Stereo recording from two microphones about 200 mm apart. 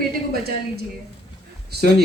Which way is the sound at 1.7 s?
55° right (ahead or behind).